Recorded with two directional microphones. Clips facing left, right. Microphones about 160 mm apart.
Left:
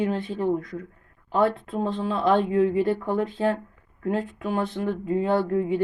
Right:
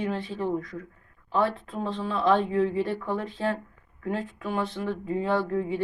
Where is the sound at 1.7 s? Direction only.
45° left (ahead or behind).